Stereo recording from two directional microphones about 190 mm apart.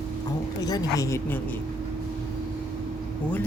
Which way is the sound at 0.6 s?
20° left (ahead or behind).